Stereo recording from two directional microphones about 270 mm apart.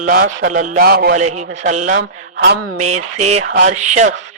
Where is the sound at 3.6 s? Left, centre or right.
Right.